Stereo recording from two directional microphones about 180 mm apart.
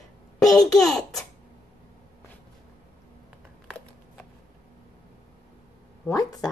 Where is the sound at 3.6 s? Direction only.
5° left (ahead or behind).